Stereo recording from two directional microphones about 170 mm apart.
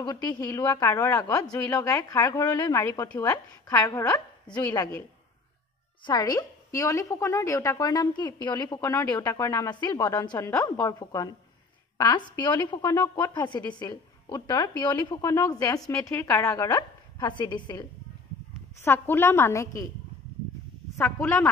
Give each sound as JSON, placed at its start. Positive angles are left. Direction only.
{"t": 0.3, "sound": "a woman's voice", "side_deg": 20}
{"t": 4.5, "sound": "a woman's voice", "side_deg": 10}
{"t": 6.0, "sound": "a woman's voice", "side_deg": 25}
{"t": 18.8, "sound": "a woman's voice", "side_deg": 15}
{"t": 21.0, "sound": "a woman's voice", "side_deg": 15}